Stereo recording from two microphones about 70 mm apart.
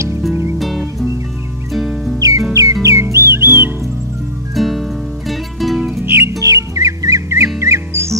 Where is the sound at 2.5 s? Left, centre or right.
Right.